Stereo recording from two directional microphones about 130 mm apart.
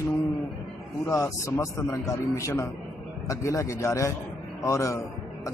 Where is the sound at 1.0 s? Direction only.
25° left (ahead or behind).